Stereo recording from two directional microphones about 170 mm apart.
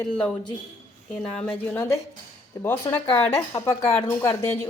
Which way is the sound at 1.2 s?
5° left (ahead or behind).